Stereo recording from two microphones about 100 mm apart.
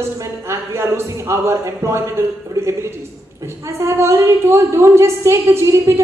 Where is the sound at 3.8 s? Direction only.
30° right (ahead or behind).